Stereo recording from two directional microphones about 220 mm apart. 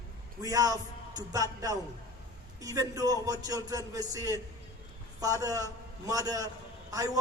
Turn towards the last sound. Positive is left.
turn(degrees=-15)  # may be behind; listen again after turning